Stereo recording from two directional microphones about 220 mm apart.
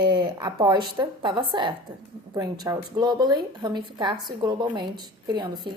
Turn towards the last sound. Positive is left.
turn(degrees=-20)  # may be behind; listen again after turning